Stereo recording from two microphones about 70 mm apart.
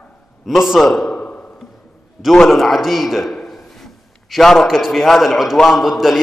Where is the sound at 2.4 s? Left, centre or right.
Centre.